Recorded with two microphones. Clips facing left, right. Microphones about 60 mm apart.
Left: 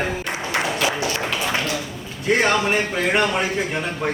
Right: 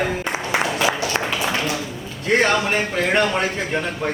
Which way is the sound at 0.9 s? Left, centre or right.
Centre.